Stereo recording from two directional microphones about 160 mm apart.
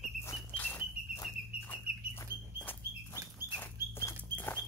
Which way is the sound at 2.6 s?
10° left (ahead or behind).